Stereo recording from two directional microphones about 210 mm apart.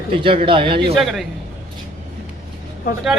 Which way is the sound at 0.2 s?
25° right (ahead or behind).